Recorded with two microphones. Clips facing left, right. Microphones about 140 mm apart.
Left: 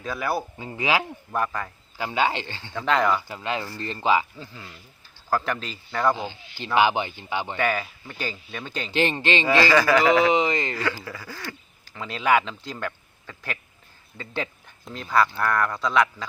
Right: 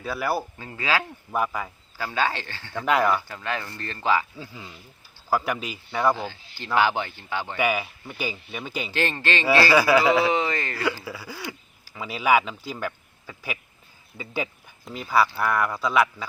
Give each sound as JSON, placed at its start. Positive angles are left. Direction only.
{"t": 0.0, "sound": "speech", "side_deg": -5}
{"t": 0.6, "sound": "speech", "side_deg": 20}
{"t": 1.3, "sound": "speech", "side_deg": -10}
{"t": 2.0, "sound": "speech", "side_deg": 20}
{"t": 2.7, "sound": "speech", "side_deg": -10}
{"t": 3.2, "sound": "speech", "side_deg": 20}
{"t": 4.4, "sound": "speech", "side_deg": -10}
{"t": 6.1, "sound": "speech", "side_deg": 20}
{"t": 7.5, "sound": "speech", "side_deg": -10}
{"t": 8.9, "sound": "speech", "side_deg": 20}
{"t": 9.5, "sound": "speech", "side_deg": -10}
{"t": 10.3, "sound": "speech", "side_deg": 20}
{"t": 11.0, "sound": "speech", "side_deg": -10}